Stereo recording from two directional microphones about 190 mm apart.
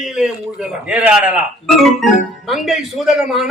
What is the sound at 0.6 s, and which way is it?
Music, 5° right (ahead or behind).